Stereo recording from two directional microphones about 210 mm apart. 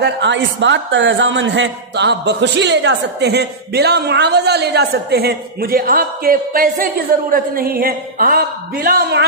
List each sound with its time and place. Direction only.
0.0 s a man's voice: 60° right (ahead or behind); by 9.2 s 45° right (ahead or behind)